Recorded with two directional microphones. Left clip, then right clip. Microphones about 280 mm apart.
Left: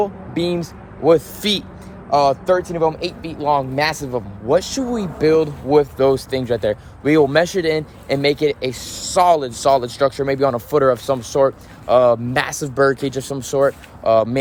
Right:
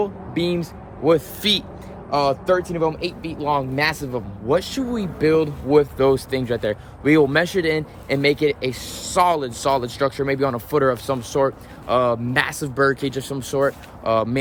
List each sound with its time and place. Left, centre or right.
0.0 s a man's voice: centre